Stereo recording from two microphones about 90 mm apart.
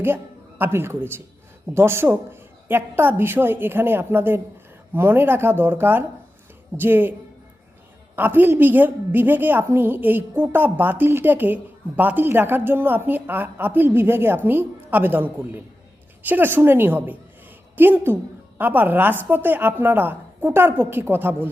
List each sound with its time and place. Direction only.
0.6 s a woman's voice: 25° right (ahead or behind)
8.1 s a woman's voice: 20° right (ahead or behind)